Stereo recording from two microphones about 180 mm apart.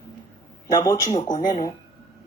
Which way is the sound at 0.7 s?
25° left (ahead or behind).